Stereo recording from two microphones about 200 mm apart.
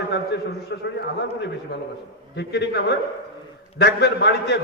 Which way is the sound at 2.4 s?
55° left (ahead or behind).